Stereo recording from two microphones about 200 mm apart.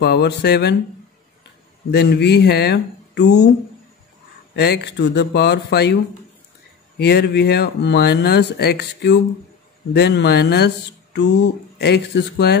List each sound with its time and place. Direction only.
0.0 s speech: 55° left (ahead or behind)
1.9 s speech: 55° left (ahead or behind)
4.6 s speech: 55° left (ahead or behind)
7.0 s speech: 55° left (ahead or behind)
11.8 s speech: 55° left (ahead or behind)